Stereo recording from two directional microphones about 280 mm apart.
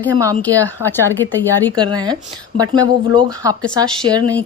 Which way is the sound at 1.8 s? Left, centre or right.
Centre.